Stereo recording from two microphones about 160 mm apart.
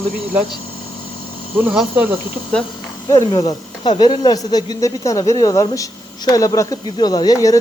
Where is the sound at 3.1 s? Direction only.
30° left (ahead or behind).